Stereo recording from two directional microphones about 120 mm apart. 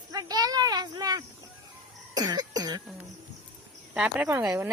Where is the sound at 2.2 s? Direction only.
30° right (ahead or behind).